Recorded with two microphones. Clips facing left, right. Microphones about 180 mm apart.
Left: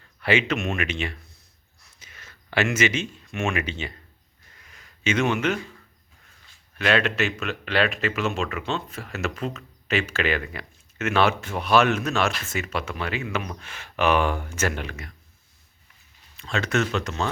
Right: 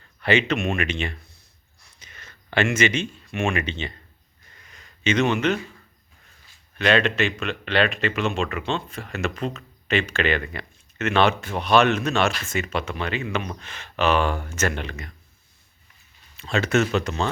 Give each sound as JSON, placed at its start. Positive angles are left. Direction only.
{"t": 0.2, "sound": "speech", "side_deg": 5}
{"t": 1.8, "sound": "a sound", "side_deg": 5}
{"t": 6.7, "sound": "speech", "side_deg": 5}
{"t": 16.4, "sound": "speech", "side_deg": -5}